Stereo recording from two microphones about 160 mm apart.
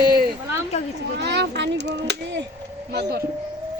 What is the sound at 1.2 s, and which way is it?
A child's voice, 90° right.